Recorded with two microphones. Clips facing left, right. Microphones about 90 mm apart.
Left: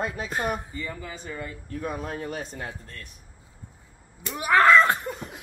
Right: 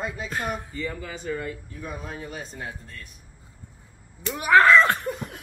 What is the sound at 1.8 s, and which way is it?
Speech, 45° left (ahead or behind).